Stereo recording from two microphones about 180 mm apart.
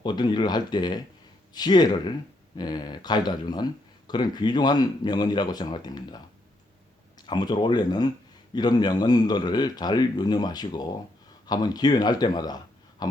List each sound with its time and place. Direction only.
0.0 s speech: 25° left (ahead or behind)
7.3 s speech: 25° left (ahead or behind)